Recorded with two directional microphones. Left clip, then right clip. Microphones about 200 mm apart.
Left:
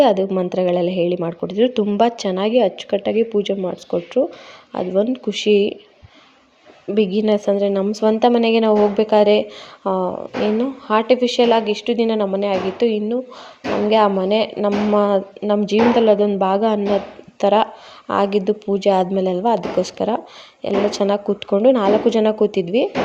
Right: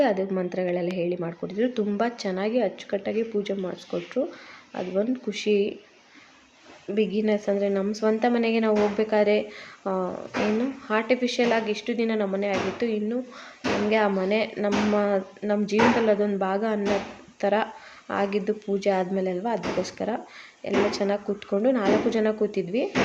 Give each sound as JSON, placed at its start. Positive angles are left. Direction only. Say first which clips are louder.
{"t": 0.0, "sound": "a woman's voice", "louder": "left 9 dB", "side_deg": 30}
{"t": 3.6, "sound": "speech", "louder": "left 9 dB", "side_deg": 20}
{"t": 4.7, "sound": "a woman's voice", "louder": "left 8 dB", "side_deg": 30}
{"t": 6.9, "sound": "a woman's voice", "louder": "left 7 dB", "side_deg": 35}